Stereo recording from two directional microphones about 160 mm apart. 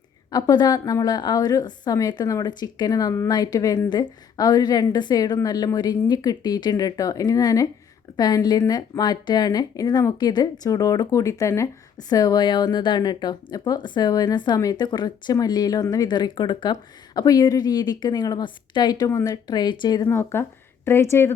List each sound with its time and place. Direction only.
0.3 s speech: 25° left (ahead or behind)
20.1 s speech: 15° left (ahead or behind)